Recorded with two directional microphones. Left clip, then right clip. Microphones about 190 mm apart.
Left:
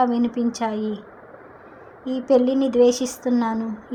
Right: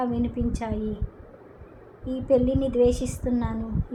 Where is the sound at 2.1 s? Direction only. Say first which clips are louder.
Left 4 dB; 35° left (ahead or behind).